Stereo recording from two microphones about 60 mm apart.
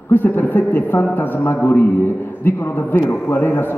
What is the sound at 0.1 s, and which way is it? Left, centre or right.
A man's voice, left.